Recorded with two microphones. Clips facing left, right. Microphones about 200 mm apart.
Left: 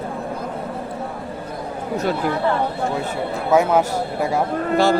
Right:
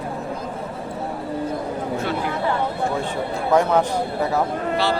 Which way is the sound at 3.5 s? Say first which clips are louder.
Left 1 dB; 10° left (ahead or behind).